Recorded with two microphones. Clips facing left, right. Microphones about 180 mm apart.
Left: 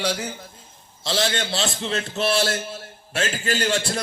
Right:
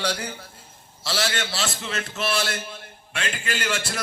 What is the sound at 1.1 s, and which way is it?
A man's voice, 25° left (ahead or behind).